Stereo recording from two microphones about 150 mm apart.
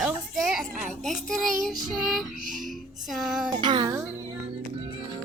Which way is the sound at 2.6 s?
Centre (ahead or behind).